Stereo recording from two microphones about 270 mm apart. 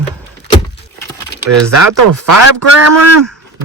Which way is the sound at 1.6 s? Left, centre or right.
Right.